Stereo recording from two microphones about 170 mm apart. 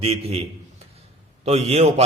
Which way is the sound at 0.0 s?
35° right (ahead or behind).